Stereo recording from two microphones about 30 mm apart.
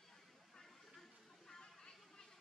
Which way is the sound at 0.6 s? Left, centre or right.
Centre.